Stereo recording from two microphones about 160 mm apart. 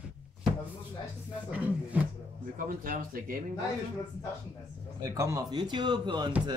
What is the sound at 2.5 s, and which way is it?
Speech, 60° right (ahead or behind).